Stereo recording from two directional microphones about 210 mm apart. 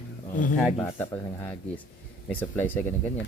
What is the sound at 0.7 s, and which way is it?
Speech, 10° left (ahead or behind).